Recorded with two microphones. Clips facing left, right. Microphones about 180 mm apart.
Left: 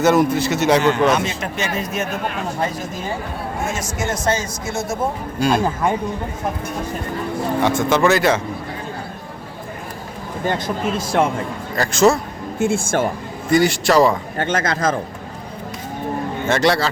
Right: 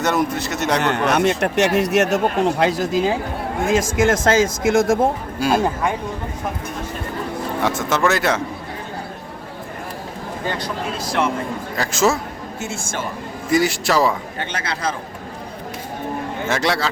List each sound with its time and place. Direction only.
0.0 s a man's voice: centre (ahead or behind)
0.8 s a man's voice: 65° right (ahead or behind); by 4.9 s 90° right
5.4 s a man's voice: 5° right (ahead or behind)
7.6 s a man's voice: centre (ahead or behind)
10.6 s speech: 50° left (ahead or behind)
11.8 s a man's voice: centre (ahead or behind)
12.5 s speech: 55° left (ahead or behind)
13.5 s a man's voice: centre (ahead or behind)
14.3 s speech: 45° left (ahead or behind)
16.5 s a man's voice: centre (ahead or behind)